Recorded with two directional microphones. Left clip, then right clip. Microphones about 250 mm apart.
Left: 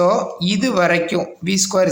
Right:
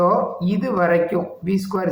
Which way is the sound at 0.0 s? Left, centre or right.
Left.